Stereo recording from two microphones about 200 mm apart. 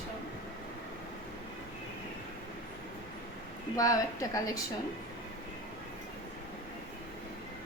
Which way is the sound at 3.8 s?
15° left (ahead or behind).